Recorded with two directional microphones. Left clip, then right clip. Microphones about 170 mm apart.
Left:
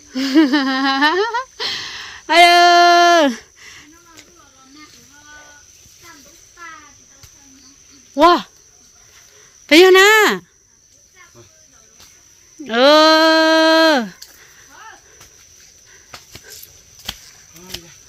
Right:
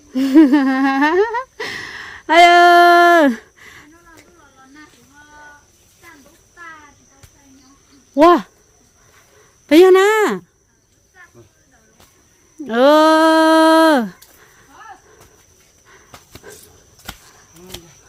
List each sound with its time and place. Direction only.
0.1 s humming: 40° right (ahead or behind)
8.1 s speech: 35° right (ahead or behind)
9.6 s speech: 15° right (ahead or behind)
12.6 s speech: 20° right (ahead or behind)